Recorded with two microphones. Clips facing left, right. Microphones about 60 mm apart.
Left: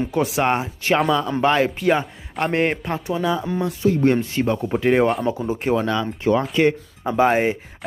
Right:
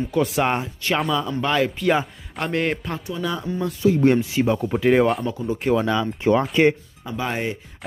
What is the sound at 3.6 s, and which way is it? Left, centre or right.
Speech, centre.